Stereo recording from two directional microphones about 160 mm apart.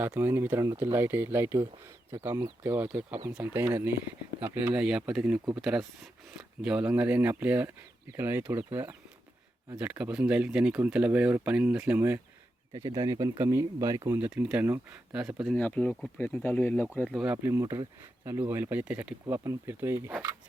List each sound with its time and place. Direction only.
0.0 s speech: 15° right (ahead or behind)
6.6 s speech: 5° right (ahead or behind)
12.7 s speech: 25° right (ahead or behind)
14.2 s speech: 10° right (ahead or behind)
15.5 s speech: 10° left (ahead or behind)
17.1 s speech: 5° right (ahead or behind)
17.3 s speech: 15° right (ahead or behind)